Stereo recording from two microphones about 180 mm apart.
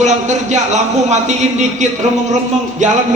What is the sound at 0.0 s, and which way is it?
A woman's voice, 40° right (ahead or behind).